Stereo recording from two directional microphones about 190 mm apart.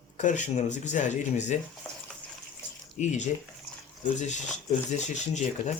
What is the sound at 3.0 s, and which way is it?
Speech, 40° left (ahead or behind).